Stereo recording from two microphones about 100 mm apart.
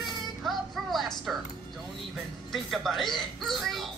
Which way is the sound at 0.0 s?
Centre (ahead or behind).